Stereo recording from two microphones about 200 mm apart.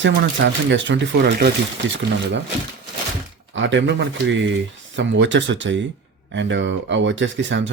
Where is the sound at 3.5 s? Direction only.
65° right (ahead or behind).